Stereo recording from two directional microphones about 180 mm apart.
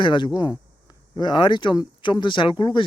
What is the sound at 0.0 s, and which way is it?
Speech, 25° left (ahead or behind).